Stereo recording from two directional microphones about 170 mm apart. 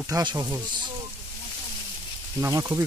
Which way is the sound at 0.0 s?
25° right (ahead or behind).